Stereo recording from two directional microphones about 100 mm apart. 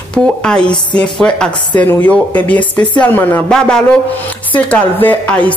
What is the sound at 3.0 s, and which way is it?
Music, 20° left (ahead or behind).